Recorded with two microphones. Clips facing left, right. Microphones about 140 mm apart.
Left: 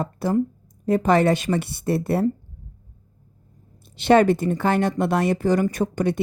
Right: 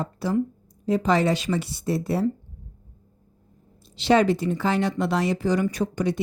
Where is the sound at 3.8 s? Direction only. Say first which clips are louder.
Left 3 dB; 55° left (ahead or behind).